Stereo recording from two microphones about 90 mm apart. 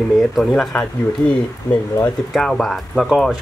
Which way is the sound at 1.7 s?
40° left (ahead or behind).